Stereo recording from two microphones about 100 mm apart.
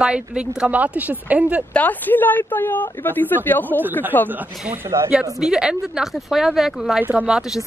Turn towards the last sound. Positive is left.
turn(degrees=-5)  # may be behind; listen again after turning